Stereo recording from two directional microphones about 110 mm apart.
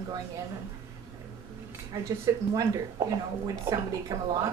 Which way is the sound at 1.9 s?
30° right (ahead or behind).